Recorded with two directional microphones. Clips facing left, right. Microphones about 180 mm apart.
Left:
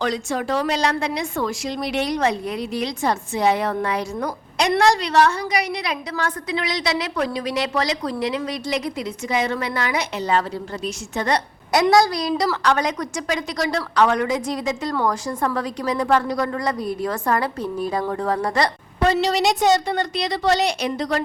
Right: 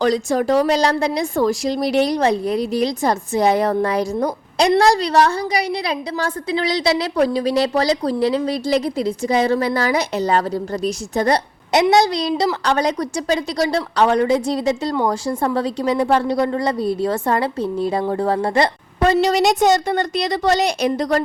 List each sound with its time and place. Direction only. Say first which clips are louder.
0.0 s a woman's voice: right 6 dB; 40° right (ahead or behind)
18.9 s a woman's voice: right 4 dB; 45° right (ahead or behind)